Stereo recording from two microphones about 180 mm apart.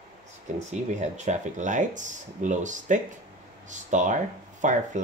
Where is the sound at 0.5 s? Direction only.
40° right (ahead or behind).